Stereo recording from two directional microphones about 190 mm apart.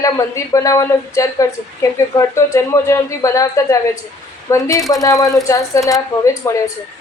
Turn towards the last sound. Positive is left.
turn(degrees=15)  # may be behind; listen again after turning